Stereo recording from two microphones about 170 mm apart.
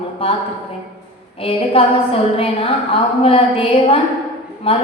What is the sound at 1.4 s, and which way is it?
A woman's voice, 35° left (ahead or behind).